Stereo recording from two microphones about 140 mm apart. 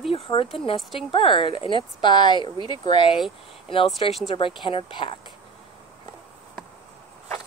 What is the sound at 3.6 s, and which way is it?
Speech, 40° left (ahead or behind).